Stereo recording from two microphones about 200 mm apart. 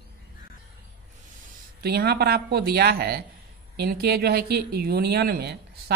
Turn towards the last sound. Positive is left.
turn(degrees=-55)  # may be behind; listen again after turning